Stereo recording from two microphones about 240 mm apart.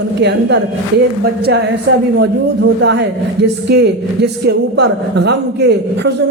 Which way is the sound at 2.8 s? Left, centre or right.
Right.